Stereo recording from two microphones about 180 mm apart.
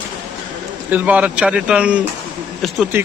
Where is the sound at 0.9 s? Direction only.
10° right (ahead or behind).